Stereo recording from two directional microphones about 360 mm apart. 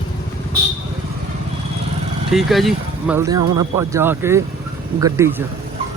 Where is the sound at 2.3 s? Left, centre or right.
Centre.